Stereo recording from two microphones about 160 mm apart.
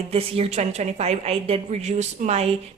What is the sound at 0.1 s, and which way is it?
A woman's voice, 40° right (ahead or behind).